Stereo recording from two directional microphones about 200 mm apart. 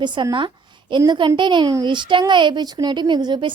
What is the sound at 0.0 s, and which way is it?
A woman's voice, 25° right (ahead or behind).